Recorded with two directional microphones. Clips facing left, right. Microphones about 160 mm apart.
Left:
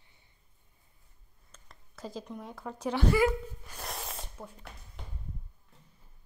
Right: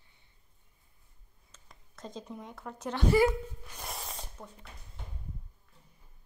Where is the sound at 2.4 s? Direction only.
10° left (ahead or behind).